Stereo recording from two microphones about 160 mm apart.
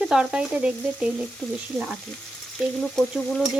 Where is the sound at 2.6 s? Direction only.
5° right (ahead or behind).